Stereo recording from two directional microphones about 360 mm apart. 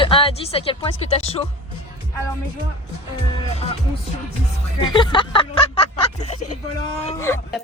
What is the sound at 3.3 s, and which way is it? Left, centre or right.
Speech, centre.